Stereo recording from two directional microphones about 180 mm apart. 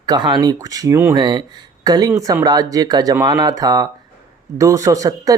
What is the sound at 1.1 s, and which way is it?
Speech, 25° right (ahead or behind).